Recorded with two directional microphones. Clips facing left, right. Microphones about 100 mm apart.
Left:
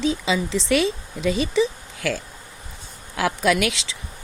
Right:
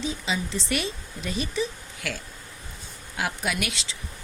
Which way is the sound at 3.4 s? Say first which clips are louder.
Left 9 dB; 90° left.